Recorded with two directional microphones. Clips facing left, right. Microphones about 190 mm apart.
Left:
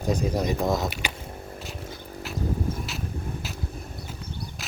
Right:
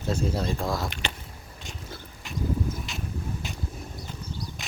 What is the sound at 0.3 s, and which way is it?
Speech, 15° left (ahead or behind).